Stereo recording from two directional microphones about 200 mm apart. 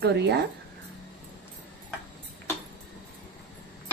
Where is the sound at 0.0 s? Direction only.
55° right (ahead or behind).